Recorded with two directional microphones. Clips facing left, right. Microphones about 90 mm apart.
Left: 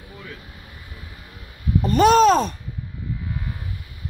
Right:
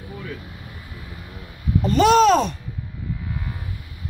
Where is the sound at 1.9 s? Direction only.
40° left (ahead or behind).